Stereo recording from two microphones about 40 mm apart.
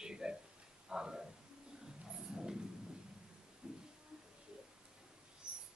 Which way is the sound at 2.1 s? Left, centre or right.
Centre.